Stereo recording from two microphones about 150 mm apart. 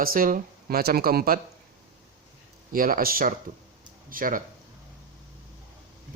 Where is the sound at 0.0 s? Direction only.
70° right (ahead or behind); by 1.4 s 90° right.